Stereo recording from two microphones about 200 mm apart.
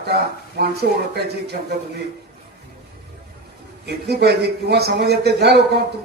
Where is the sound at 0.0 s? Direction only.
50° right (ahead or behind).